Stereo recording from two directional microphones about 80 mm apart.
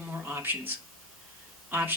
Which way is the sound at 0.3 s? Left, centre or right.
Right.